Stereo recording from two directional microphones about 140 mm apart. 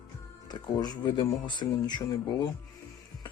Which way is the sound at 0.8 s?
30° left (ahead or behind).